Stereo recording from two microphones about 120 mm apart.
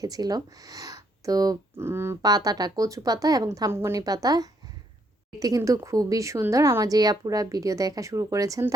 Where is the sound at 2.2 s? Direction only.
30° right (ahead or behind).